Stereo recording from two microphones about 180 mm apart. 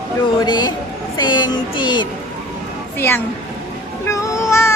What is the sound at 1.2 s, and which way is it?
Music, 25° left (ahead or behind).